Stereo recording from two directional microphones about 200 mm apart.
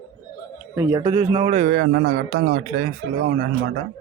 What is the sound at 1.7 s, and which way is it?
A man's voice, 65° right (ahead or behind).